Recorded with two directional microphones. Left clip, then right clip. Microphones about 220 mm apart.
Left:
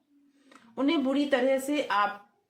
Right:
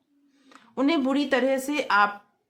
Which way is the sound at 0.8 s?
45° right (ahead or behind).